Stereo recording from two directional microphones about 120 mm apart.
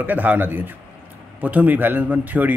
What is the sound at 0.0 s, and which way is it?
A man's voice, 15° right (ahead or behind).